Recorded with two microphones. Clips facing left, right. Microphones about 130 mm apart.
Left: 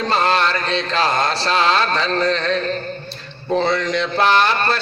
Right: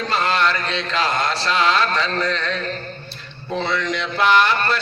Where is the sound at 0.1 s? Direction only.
30° left (ahead or behind).